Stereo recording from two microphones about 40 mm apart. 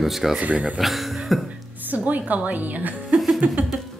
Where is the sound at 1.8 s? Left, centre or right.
Right.